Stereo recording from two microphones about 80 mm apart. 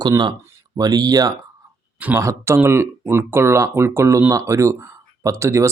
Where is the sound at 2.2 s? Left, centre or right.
Right.